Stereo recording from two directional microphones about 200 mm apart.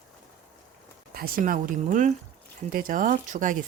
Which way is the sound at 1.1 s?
45° right (ahead or behind).